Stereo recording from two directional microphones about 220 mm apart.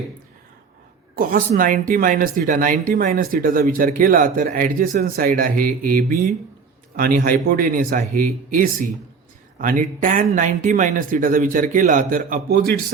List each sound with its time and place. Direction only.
1.1 s speech: 40° right (ahead or behind)